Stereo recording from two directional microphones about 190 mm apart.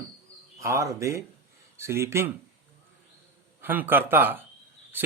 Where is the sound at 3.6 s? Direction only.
10° right (ahead or behind).